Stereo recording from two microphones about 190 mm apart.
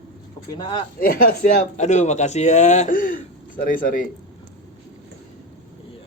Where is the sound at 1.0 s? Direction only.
50° left (ahead or behind).